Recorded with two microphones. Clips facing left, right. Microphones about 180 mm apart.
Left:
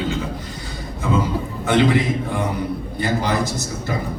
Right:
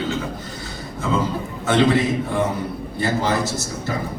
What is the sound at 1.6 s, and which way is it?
Speech, 15° left (ahead or behind).